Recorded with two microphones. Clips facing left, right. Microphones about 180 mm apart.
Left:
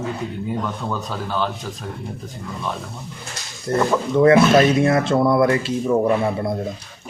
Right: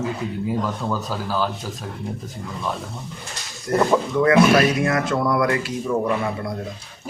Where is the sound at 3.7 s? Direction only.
25° left (ahead or behind).